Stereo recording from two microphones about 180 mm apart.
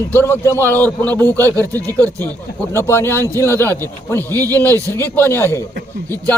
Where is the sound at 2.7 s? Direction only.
15° left (ahead or behind).